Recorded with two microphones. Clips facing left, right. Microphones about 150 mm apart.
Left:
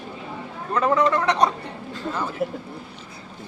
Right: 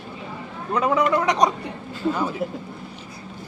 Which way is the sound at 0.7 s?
10° right (ahead or behind).